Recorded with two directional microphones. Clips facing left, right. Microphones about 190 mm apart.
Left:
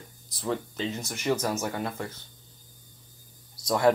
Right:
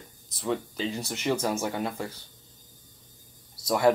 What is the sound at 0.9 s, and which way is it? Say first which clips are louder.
Speech: left 1 dB; 15° right (ahead or behind).